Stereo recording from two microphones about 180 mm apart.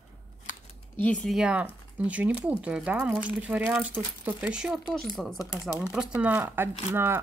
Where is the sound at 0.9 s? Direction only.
5° left (ahead or behind).